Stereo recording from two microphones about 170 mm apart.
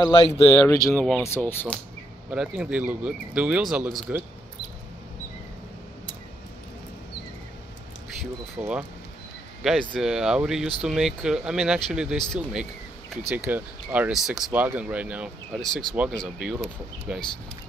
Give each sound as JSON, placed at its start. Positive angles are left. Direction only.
{"t": 0.0, "sound": "speech", "side_deg": 20}
{"t": 2.3, "sound": "speech", "side_deg": -5}
{"t": 8.2, "sound": "speech", "side_deg": -5}